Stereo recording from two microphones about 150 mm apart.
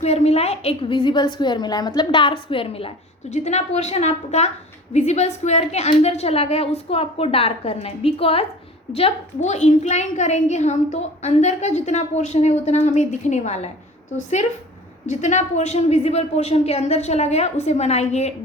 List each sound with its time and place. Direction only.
0.0 s a woman's voice: 45° left (ahead or behind)
15.0 s a woman's voice: 50° left (ahead or behind)